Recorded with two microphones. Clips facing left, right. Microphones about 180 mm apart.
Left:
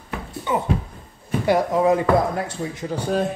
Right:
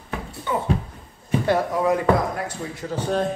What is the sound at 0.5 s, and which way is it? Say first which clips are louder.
Speech: left 1 dB; 20° left (ahead or behind).